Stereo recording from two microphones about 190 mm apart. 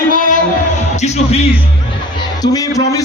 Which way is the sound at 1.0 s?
35° left (ahead or behind).